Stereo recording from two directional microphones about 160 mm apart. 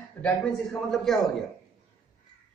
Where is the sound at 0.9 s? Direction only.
Centre (ahead or behind).